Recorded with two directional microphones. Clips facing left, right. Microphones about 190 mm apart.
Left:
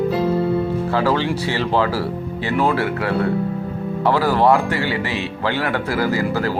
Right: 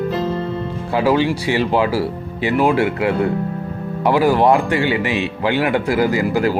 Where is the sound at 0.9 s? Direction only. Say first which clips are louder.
Right 6 dB; 15° right (ahead or behind).